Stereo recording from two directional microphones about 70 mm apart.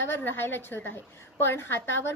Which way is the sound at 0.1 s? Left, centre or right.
Left.